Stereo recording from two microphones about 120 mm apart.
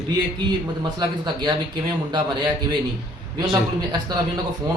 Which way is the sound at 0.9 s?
40° right (ahead or behind).